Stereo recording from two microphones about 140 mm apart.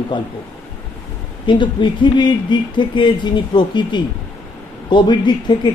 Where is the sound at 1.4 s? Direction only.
35° left (ahead or behind).